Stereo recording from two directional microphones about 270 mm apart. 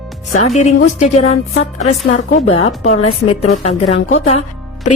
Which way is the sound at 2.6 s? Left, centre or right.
Left.